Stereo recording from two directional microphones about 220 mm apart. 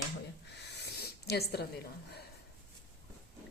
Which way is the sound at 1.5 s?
45° left (ahead or behind).